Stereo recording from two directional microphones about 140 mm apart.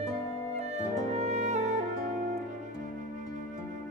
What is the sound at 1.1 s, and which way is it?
Music, 55° right (ahead or behind).